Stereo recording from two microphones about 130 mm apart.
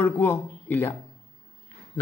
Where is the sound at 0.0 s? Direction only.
15° left (ahead or behind).